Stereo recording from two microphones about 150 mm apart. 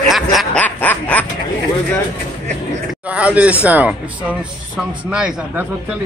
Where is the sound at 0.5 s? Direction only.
10° left (ahead or behind).